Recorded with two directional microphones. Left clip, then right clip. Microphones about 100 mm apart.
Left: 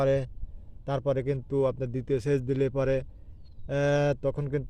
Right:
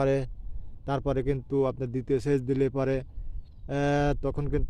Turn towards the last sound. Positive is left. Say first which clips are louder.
# left 1 dB
turn(degrees=-15)  # may be behind; listen again after turning